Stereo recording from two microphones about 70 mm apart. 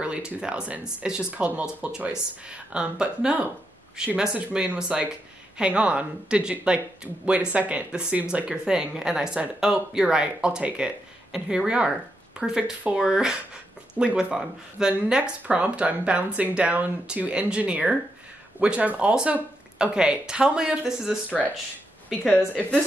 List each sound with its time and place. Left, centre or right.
0.0 s speech: centre
22.5 s speech: left